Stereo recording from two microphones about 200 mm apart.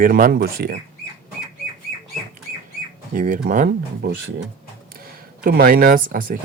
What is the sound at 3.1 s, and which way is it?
Speech, 45° right (ahead or behind).